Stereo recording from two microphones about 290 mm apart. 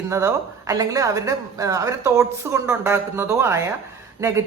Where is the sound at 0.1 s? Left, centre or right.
Centre.